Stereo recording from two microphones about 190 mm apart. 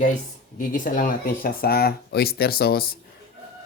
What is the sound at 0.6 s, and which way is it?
Speech, 45° left (ahead or behind).